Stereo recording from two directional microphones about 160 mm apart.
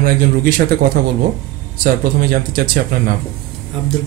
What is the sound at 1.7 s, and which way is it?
Speech, 65° right (ahead or behind).